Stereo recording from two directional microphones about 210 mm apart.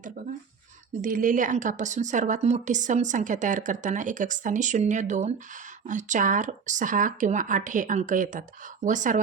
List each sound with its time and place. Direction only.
1.0 s a woman's voice: 40° right (ahead or behind)